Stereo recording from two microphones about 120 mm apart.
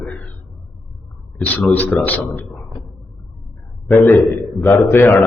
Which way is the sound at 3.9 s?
20° left (ahead or behind).